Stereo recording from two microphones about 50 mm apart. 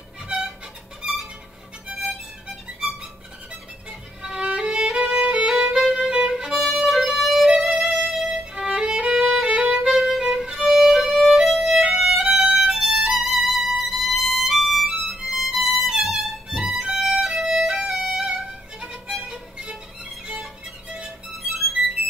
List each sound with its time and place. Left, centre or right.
4.2 s violin: centre
4.9 s music: centre
6.1 s music: centre
6.6 s music: centre
8.5 s violin: centre
9.1 s violin: centre
10.7 s music: centre
11.9 s violin: centre
17.4 s music: centre
21.5 s music: centre